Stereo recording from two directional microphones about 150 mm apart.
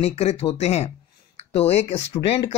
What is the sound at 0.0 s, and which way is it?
Speech, 45° left (ahead or behind).